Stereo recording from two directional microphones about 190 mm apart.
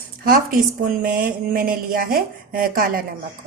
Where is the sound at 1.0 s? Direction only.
45° right (ahead or behind).